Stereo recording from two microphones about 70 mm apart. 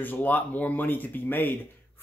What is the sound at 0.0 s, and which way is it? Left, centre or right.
Speech, left.